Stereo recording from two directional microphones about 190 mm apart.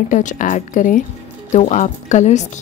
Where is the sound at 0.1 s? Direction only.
40° left (ahead or behind).